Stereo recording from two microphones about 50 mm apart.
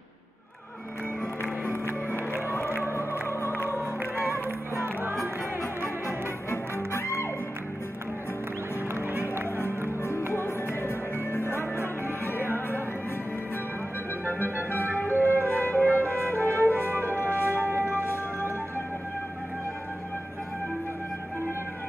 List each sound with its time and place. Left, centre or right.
1.4 s music: left
2.5 s music: left
4.3 s music: right
6.0 s music: left
9.8 s music: left
12.5 s music: left
14.4 s music: left
17.6 s music: right